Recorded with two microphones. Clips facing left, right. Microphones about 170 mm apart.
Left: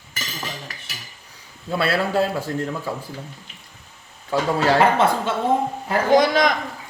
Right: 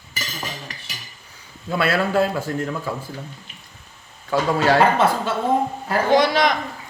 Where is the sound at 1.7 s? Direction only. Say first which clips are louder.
Right 1 dB; 30° left (ahead or behind).